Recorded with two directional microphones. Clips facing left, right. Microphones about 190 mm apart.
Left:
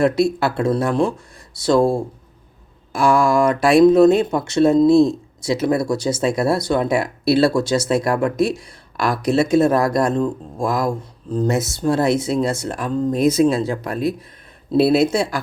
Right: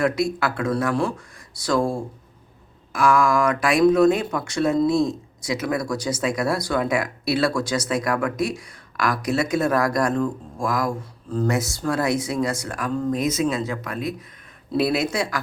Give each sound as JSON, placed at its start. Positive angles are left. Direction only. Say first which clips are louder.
{"t": 0.0, "sound": "speech", "louder": "left 5 dB", "side_deg": 30}
{"t": 2.9, "sound": "speech", "louder": "left 3 dB", "side_deg": 30}